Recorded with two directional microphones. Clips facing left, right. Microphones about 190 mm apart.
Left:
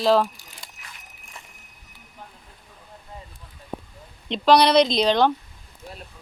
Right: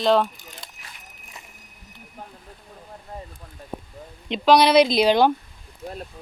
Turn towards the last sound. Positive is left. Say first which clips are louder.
# right 2 dB
turn(degrees=-10)  # may be behind; listen again after turning